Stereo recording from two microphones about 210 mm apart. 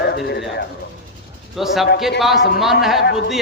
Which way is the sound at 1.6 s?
Centre (ahead or behind).